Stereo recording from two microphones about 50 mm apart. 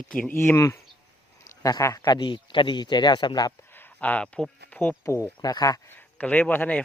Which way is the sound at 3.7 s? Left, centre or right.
Left.